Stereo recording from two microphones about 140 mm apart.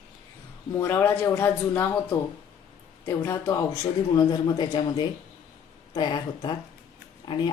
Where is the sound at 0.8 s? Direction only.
15° left (ahead or behind).